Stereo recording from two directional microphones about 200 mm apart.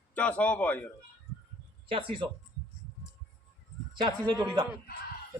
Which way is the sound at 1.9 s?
25° right (ahead or behind).